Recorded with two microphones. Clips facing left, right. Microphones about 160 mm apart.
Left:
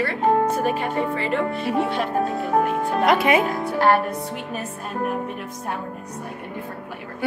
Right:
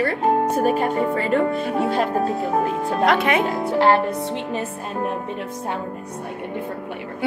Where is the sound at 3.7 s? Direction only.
25° right (ahead or behind).